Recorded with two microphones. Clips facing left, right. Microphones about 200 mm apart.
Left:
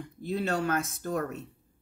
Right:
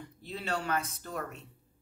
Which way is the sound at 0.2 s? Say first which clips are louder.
Left 7 dB; 45° left (ahead or behind).